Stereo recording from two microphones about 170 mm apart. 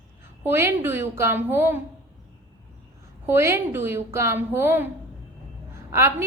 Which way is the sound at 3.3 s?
15° right (ahead or behind).